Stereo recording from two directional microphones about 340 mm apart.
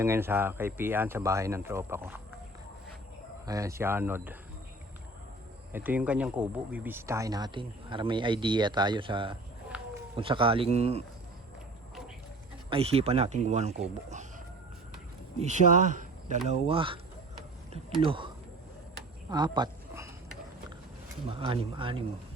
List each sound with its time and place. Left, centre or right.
0.0 s speech: centre
3.4 s speech: centre
5.7 s speech: centre
9.7 s run: centre
10.2 s speech: centre
12.7 s speech: centre
18.0 s speech: centre
19.3 s a sound: centre
21.2 s speech: centre